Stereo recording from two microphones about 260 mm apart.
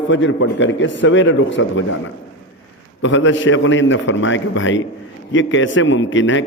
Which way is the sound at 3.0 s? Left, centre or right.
Left.